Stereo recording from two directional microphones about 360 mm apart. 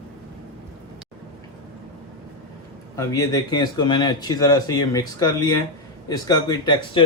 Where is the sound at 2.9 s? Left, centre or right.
Centre.